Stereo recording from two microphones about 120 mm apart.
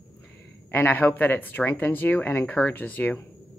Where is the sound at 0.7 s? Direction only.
15° left (ahead or behind).